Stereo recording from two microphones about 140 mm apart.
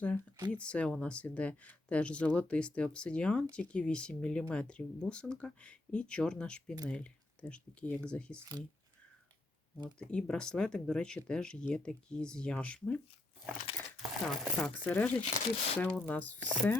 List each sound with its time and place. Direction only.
0.5 s speech: 10° left (ahead or behind)
8.4 s speech: 25° right (ahead or behind)
10.0 s speech: 5° left (ahead or behind)
15.2 s speech: 45° left (ahead or behind)
16.0 s speech: 10° left (ahead or behind)